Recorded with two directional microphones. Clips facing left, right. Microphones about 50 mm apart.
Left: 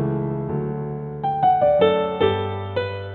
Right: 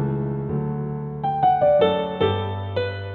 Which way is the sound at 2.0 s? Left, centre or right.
Centre.